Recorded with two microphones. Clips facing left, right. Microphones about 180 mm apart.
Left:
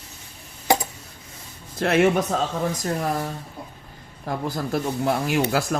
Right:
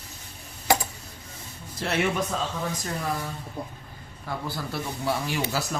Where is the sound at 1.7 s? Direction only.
50° left (ahead or behind).